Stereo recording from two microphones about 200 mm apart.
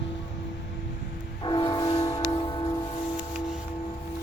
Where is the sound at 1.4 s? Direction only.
20° left (ahead or behind).